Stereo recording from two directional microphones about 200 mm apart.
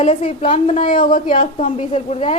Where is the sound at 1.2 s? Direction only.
40° left (ahead or behind).